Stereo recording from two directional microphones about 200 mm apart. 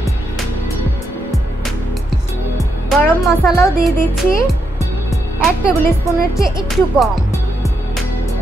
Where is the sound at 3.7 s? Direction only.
Centre (ahead or behind).